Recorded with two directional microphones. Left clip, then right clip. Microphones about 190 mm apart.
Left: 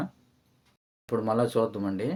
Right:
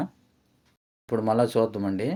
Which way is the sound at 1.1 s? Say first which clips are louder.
Right 3 dB; 25° right (ahead or behind).